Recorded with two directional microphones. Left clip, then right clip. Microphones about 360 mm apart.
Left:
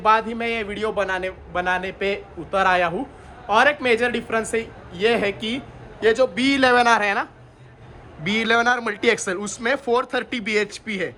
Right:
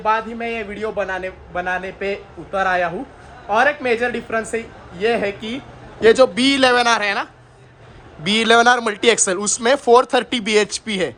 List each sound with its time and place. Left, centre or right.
0.0 s a man's voice: centre
6.0 s a man's voice: right
6.3 s a man's voice: centre